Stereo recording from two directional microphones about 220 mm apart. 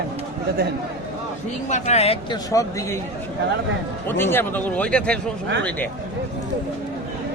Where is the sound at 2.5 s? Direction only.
15° left (ahead or behind).